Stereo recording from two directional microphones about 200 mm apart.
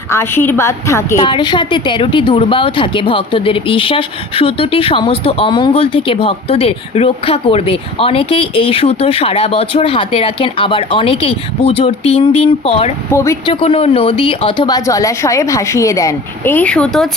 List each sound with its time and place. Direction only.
0.1 s a woman's voice: 10° left (ahead or behind); by 12.9 s 30° left (ahead or behind)
13.1 s speech: 15° left (ahead or behind)
13.5 s speech: 25° left (ahead or behind); by 17.1 s 5° left (ahead or behind)